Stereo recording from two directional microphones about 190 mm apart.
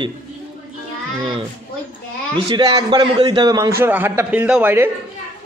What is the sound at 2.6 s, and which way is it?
A man's voice, 25° right (ahead or behind).